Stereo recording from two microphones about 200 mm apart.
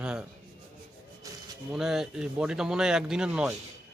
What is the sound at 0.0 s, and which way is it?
Speech, 5° right (ahead or behind).